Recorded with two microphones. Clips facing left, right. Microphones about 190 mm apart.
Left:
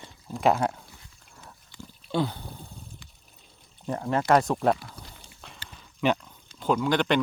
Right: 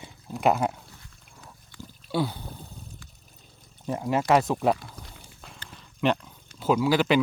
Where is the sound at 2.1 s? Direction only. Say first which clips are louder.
Even; 5° right (ahead or behind).